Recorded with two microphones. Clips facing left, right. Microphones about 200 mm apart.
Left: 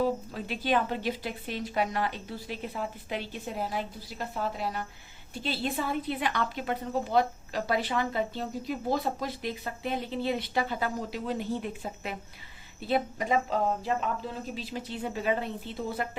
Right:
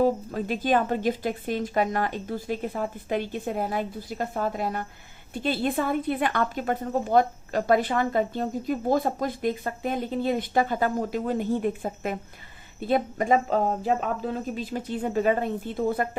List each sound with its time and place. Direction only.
0.0 s a woman's voice: 45° right (ahead or behind)